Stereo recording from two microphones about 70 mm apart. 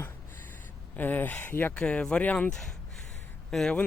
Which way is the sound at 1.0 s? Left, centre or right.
Left.